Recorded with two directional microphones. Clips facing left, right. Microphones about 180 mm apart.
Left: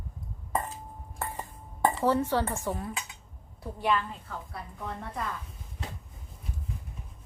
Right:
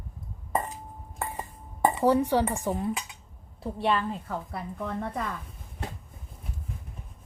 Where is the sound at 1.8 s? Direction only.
15° right (ahead or behind).